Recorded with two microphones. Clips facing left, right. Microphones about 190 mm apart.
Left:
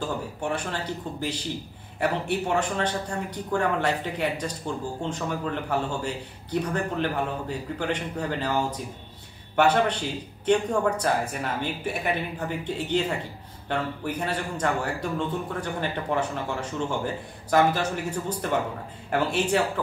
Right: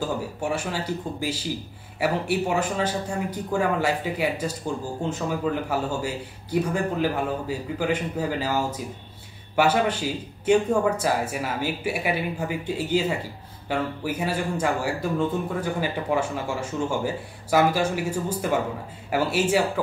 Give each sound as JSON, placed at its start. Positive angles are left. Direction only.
{"t": 0.0, "sound": "speech", "side_deg": -10}